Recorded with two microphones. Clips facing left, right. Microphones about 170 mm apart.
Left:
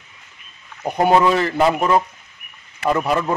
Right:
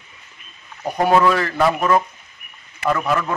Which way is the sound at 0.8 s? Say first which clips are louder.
Left 1 dB; 20° left (ahead or behind).